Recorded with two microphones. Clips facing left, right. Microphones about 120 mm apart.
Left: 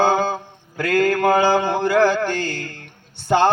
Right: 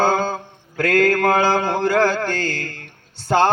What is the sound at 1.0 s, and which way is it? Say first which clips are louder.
Mantra: left 1 dB; 20° left (ahead or behind).